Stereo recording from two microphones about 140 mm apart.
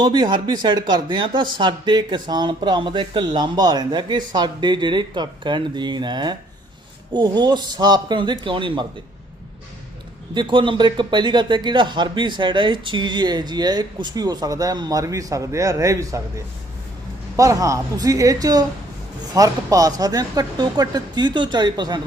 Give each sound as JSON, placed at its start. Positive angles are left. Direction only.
{"t": 0.0, "sound": "speech", "side_deg": -30}
{"t": 10.3, "sound": "speech", "side_deg": -35}
{"t": 17.3, "sound": "speech", "side_deg": -25}